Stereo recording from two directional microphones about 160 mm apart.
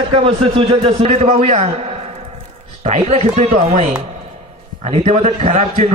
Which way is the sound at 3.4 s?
55° right (ahead or behind).